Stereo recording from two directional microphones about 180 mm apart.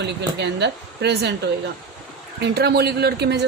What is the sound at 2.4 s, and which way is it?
Speech, 65° right (ahead or behind).